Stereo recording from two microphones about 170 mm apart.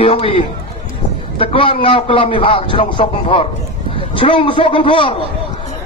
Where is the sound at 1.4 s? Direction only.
30° left (ahead or behind).